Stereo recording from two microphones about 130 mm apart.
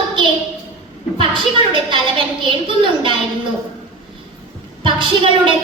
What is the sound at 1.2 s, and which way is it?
A woman's voice, 40° right (ahead or behind).